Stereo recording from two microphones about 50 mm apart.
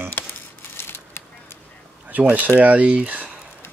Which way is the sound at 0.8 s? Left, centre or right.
Left.